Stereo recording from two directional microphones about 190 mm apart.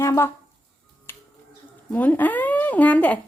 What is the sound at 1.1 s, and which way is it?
Finger snapping, 10° left (ahead or behind).